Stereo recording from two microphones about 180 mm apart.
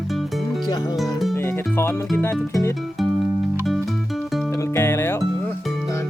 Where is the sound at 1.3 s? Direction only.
15° left (ahead or behind).